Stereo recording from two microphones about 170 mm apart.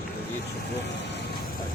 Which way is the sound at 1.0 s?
90° left.